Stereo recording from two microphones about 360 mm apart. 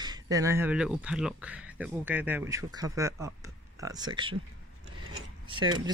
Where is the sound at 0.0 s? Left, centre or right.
Centre.